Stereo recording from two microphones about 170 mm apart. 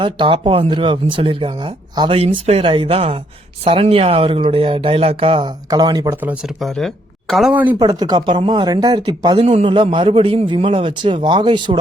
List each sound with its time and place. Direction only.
0.0 s speech: 30° right (ahead or behind)
5.7 s a man's voice: 25° right (ahead or behind)
6.1 s speech: 5° right (ahead or behind)
7.8 s a man's voice: 25° right (ahead or behind)
9.4 s a man's voice: 35° right (ahead or behind)